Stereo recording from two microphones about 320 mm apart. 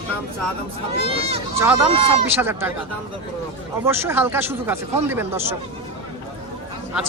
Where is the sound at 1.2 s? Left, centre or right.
Centre.